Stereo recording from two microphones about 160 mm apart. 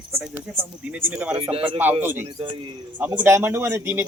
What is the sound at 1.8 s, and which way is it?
Speech, 10° right (ahead or behind).